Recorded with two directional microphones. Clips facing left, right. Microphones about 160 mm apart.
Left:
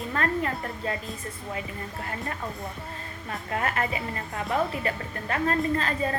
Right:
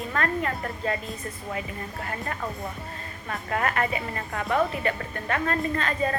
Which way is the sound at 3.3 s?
30° left (ahead or behind).